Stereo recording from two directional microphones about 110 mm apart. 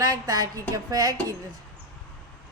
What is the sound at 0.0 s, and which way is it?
Speech, 30° right (ahead or behind).